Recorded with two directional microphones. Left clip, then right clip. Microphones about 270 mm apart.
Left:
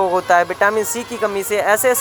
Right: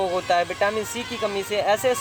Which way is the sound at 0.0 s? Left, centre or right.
Centre.